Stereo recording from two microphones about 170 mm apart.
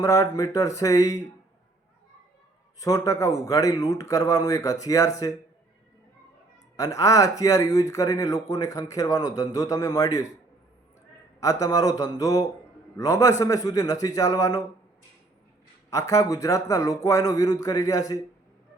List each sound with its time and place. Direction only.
0.0 s speech: 20° left (ahead or behind)
2.8 s speech: 20° left (ahead or behind)
6.7 s speech: 20° left (ahead or behind)
11.3 s speech: 20° left (ahead or behind)
15.9 s speech: 20° left (ahead or behind)